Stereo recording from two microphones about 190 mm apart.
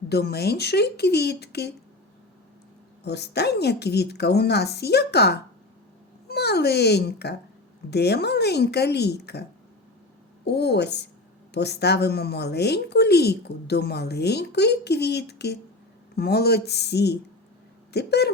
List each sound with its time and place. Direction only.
0.1 s a woman's voice: 60° left (ahead or behind)
3.0 s a woman's voice: 60° left (ahead or behind)